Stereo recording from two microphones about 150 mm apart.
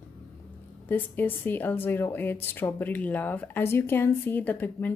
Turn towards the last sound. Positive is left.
turn(degrees=10)  # may be behind; listen again after turning